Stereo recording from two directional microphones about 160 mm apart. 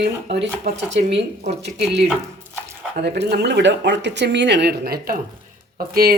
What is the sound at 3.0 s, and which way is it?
Speech, 90° right.